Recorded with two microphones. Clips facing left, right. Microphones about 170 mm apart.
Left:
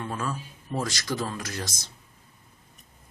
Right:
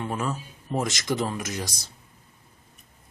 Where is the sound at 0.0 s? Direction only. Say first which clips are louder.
Right 3 dB; 20° right (ahead or behind).